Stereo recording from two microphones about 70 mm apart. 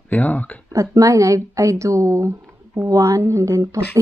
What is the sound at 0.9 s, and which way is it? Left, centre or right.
A woman's voice, right.